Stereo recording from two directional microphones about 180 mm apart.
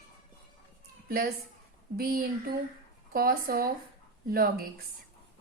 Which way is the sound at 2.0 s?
55° right (ahead or behind).